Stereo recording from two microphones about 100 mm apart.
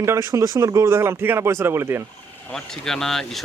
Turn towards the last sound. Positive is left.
turn(degrees=5)  # may be behind; listen again after turning